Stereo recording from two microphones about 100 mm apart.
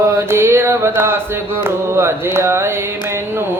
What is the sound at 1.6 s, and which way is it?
Mantra, 25° right (ahead or behind).